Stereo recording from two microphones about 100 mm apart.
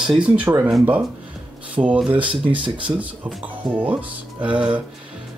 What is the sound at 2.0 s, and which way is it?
Speech, 10° right (ahead or behind).